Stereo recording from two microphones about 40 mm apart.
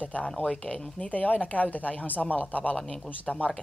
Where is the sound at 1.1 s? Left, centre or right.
Left.